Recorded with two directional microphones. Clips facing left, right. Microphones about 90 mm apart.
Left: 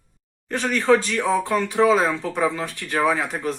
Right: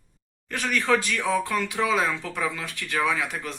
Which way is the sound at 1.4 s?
30° left (ahead or behind).